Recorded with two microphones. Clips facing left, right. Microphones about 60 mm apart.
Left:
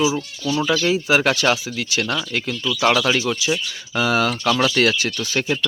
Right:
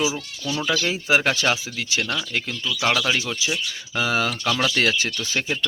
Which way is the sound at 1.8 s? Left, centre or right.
Centre.